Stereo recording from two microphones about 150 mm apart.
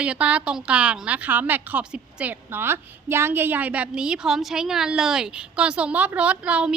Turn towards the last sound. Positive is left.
turn(degrees=-10)  # may be behind; listen again after turning